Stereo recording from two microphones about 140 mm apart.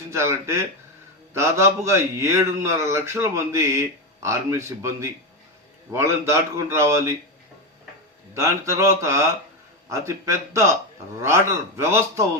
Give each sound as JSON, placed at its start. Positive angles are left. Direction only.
{"t": 0.1, "sound": "a man's voice", "side_deg": -20}
{"t": 8.4, "sound": "a man's voice", "side_deg": -20}